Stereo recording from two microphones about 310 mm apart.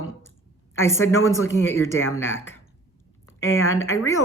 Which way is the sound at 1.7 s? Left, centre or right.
Left.